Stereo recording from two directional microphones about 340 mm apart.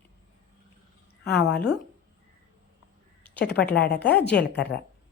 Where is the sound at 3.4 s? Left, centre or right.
Left.